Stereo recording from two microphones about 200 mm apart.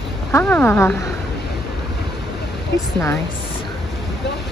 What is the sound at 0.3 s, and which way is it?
Speech, 10° left (ahead or behind).